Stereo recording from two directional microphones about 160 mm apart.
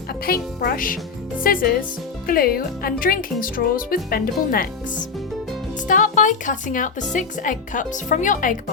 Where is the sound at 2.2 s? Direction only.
65° left (ahead or behind).